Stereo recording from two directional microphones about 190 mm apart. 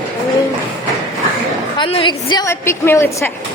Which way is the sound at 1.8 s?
25° left (ahead or behind).